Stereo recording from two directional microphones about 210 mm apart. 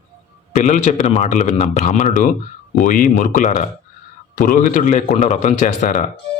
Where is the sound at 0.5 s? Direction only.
35° left (ahead or behind).